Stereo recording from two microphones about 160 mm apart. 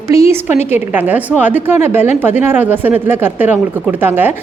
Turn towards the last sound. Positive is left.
turn(degrees=-10)  # may be behind; listen again after turning